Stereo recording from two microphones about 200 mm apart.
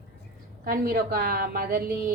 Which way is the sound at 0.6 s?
45° right (ahead or behind).